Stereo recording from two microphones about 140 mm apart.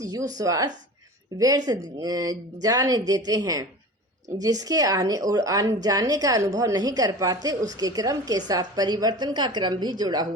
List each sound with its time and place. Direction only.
0.0 s a woman's voice: 25° right (ahead or behind)